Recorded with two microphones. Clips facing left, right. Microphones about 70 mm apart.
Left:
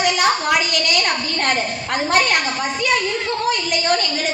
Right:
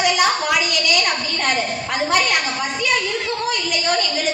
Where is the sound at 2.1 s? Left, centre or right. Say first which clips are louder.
Left 2 dB; left.